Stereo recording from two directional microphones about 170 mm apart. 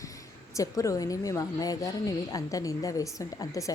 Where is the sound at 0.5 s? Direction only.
20° left (ahead or behind).